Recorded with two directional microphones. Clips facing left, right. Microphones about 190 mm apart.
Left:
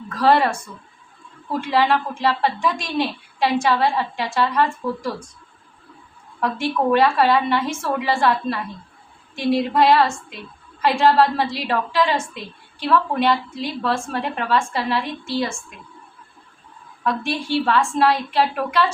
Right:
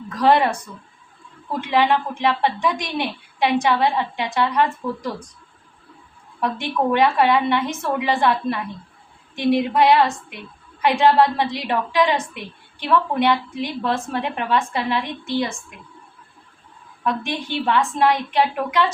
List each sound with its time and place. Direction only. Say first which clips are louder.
0.1 s a woman's voice: even; 15° right (ahead or behind)
1.6 s a woman's voice: right 1 dB; 15° right (ahead or behind)
6.4 s a woman's voice: left 1 dB; 15° right (ahead or behind)
17.0 s a woman's voice: left 1 dB; 15° right (ahead or behind)